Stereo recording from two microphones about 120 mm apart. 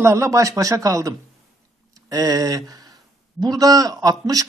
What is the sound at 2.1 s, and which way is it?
Speech, 30° right (ahead or behind).